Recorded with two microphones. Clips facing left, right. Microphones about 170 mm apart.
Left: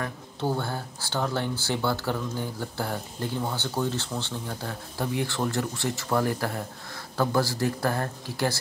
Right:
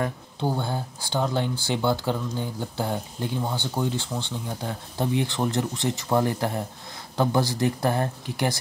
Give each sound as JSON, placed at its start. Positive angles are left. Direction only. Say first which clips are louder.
{"t": 0.0, "sound": "speech", "louder": "right 3 dB", "side_deg": -15}